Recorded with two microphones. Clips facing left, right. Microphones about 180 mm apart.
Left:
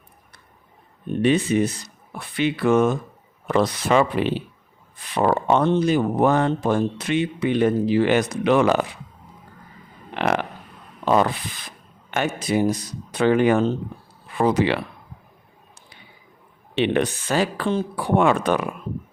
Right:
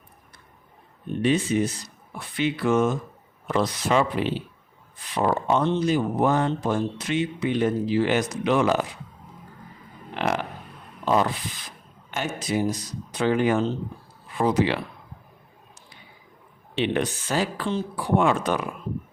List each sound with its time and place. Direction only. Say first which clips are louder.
1.1 s speech: left 3 dB; 65° left (ahead or behind)
10.2 s speech: left 4 dB; 65° left (ahead or behind)
16.7 s speech: left 4 dB; 65° left (ahead or behind)